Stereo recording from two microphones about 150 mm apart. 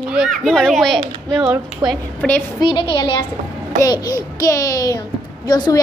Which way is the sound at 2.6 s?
35° left (ahead or behind).